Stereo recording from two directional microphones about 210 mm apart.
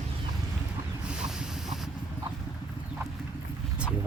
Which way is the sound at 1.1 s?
5° right (ahead or behind).